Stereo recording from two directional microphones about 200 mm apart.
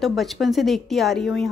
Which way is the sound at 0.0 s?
Centre (ahead or behind).